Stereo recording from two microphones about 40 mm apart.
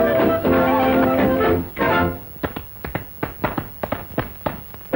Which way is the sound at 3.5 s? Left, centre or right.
Centre.